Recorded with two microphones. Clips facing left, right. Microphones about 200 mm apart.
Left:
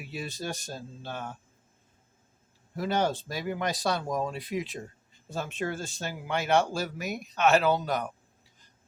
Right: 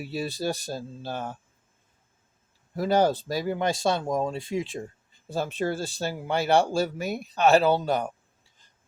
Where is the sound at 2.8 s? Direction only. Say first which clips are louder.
Right 6 dB; 35° right (ahead or behind).